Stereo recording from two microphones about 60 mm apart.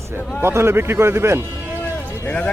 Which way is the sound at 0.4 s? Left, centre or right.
Right.